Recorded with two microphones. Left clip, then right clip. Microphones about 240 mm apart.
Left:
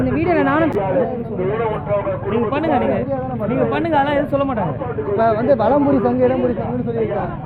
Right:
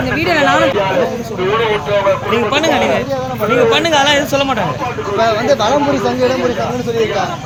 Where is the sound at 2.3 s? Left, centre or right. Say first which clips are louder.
Right 5 dB; centre.